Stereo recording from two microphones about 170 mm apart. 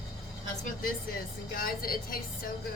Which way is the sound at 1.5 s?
60° left (ahead or behind).